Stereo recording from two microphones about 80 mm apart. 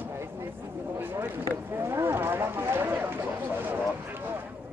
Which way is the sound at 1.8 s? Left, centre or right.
Right.